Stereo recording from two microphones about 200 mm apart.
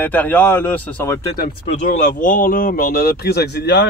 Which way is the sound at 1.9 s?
40° left (ahead or behind).